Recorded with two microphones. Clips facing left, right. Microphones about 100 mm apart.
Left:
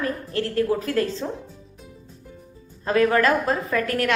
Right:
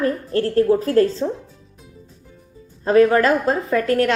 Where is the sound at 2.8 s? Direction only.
25° right (ahead or behind).